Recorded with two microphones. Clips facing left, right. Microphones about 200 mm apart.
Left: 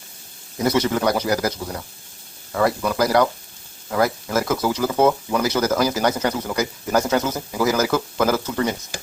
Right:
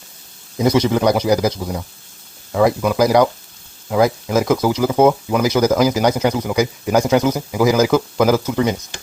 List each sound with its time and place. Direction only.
0.6 s speech: 15° right (ahead or behind)